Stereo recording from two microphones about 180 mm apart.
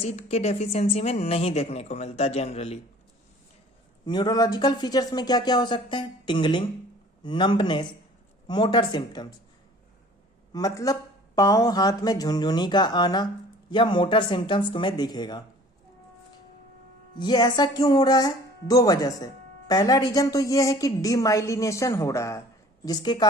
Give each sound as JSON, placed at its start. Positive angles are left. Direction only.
{"t": 0.0, "sound": "a woman's voice", "side_deg": 35}
{"t": 4.0, "sound": "a woman's voice", "side_deg": 25}
{"t": 10.5, "sound": "a woman's voice", "side_deg": 20}
{"t": 17.2, "sound": "a woman's voice", "side_deg": 25}